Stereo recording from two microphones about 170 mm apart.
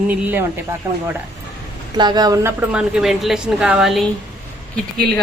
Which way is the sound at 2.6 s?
5° right (ahead or behind).